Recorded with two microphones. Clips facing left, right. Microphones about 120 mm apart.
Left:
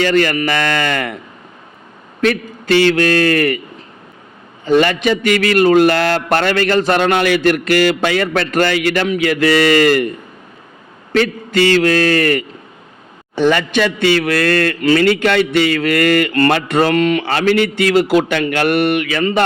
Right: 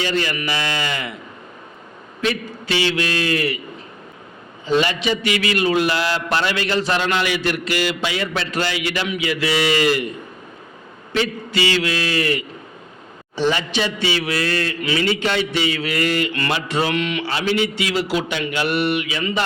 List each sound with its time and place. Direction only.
0.0 s a man's voice: 60° left (ahead or behind)
2.2 s a man's voice: 55° left (ahead or behind)
4.6 s a man's voice: 55° left (ahead or behind)
11.1 s a man's voice: 55° left (ahead or behind)
17.2 s a man's voice: 60° left (ahead or behind)